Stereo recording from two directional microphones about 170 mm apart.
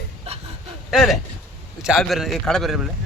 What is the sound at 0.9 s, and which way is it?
Speech, centre (ahead or behind).